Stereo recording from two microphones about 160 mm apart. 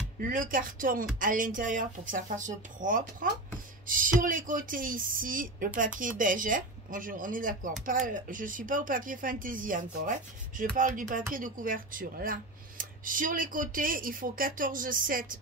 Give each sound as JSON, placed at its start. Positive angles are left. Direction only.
{"t": 0.3, "sound": "speech", "side_deg": -60}